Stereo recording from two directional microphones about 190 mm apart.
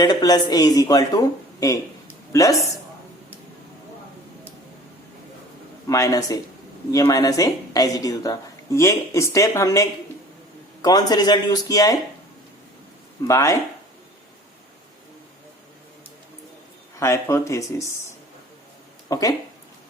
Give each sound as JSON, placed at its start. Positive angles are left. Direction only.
{"t": 0.0, "sound": "a woman's voice", "side_deg": 20}
{"t": 5.9, "sound": "a woman's voice", "side_deg": 15}
{"t": 13.2, "sound": "a woman's voice", "side_deg": 15}
{"t": 17.0, "sound": "a woman's voice", "side_deg": 15}
{"t": 19.0, "sound": "speech", "side_deg": 20}